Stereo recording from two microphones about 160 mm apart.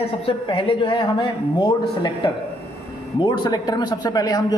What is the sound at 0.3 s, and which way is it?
Speech, 35° left (ahead or behind).